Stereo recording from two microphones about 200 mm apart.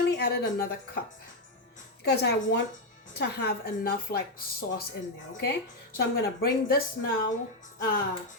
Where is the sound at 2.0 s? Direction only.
55° left (ahead or behind).